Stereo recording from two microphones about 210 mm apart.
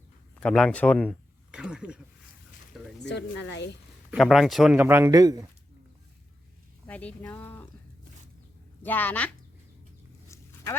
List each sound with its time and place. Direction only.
0.3 s speech: 5° left (ahead or behind)
1.5 s speech: 5° right (ahead or behind)
3.0 s speech: 55° left (ahead or behind)
4.1 s speech: centre (ahead or behind); by 5.4 s 15° right (ahead or behind)
6.8 s speech: 10° left (ahead or behind)
8.8 s a woman's voice: 10° left (ahead or behind)
10.2 s a sound: 15° left (ahead or behind)